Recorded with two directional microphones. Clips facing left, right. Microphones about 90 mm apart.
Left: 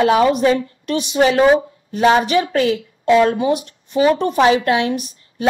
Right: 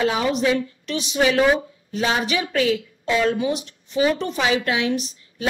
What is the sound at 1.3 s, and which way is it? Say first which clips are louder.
Speech: left 6 dB; 25° left (ahead or behind).